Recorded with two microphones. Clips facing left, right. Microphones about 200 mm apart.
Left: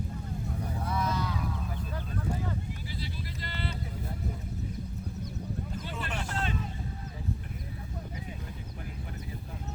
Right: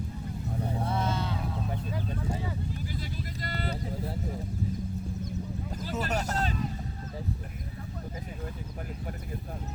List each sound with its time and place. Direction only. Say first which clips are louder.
0.6 s vehicle: right 3 dB; 30° right (ahead or behind)
2.9 s vehicle: right 2 dB; 45° right (ahead or behind)
5.7 s a sound: right 5 dB; 40° right (ahead or behind)